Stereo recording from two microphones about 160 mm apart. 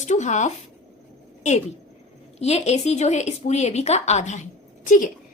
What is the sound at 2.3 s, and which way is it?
A woman's voice, 40° left (ahead or behind).